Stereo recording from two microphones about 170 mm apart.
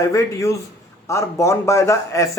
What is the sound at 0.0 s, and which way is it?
A man's voice, 15° left (ahead or behind).